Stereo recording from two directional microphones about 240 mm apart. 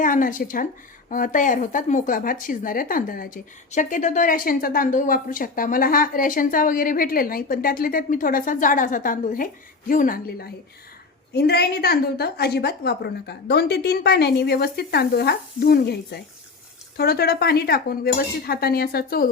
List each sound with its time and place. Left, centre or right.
0.0 s speech: left